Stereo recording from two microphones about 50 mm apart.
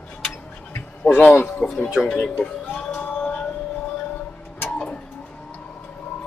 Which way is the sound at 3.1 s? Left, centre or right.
Left.